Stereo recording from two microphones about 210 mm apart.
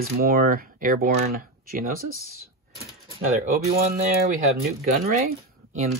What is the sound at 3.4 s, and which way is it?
Speech, 35° right (ahead or behind).